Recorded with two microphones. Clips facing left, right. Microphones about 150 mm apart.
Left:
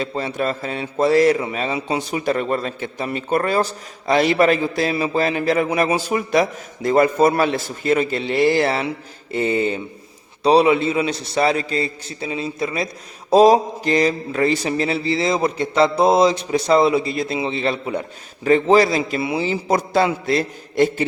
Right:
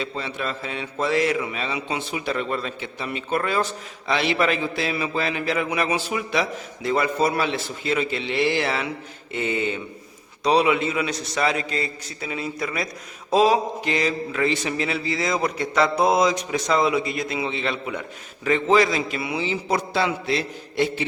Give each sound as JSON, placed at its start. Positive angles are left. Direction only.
{"t": 0.0, "sound": "a man's voice", "side_deg": 40}
{"t": 13.3, "sound": "a man's voice", "side_deg": 40}
{"t": 20.2, "sound": "mantra", "side_deg": 45}